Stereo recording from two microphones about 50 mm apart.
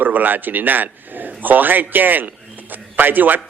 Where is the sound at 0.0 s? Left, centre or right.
Right.